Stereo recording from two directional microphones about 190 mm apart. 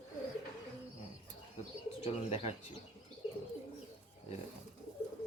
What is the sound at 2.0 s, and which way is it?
Speech, 30° left (ahead or behind).